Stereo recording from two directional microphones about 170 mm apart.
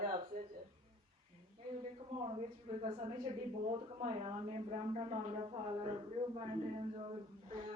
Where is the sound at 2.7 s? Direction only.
35° right (ahead or behind).